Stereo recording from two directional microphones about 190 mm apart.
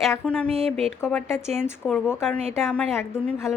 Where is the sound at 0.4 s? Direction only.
30° right (ahead or behind).